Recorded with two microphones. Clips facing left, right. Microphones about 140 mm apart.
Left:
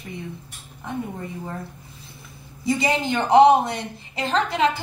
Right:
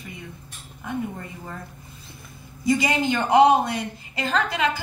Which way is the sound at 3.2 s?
30° left (ahead or behind).